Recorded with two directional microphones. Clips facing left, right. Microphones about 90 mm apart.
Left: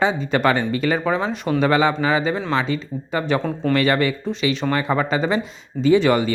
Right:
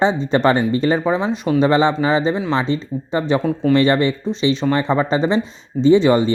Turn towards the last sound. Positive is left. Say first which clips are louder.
# right 3 dB
turn(degrees=-25)  # may be behind; listen again after turning